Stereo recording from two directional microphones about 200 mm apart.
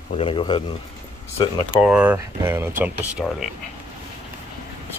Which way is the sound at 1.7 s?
5° right (ahead or behind).